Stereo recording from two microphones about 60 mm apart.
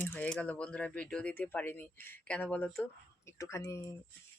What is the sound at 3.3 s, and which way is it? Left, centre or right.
Speech, left.